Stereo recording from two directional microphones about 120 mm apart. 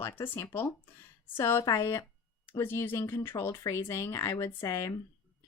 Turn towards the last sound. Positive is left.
turn(degrees=25)  # may be behind; listen again after turning